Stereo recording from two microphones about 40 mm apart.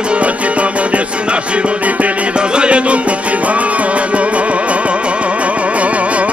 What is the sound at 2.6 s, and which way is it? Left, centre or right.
Music, right.